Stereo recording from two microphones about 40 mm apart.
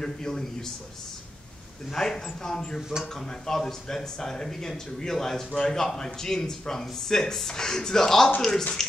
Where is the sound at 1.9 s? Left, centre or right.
Centre.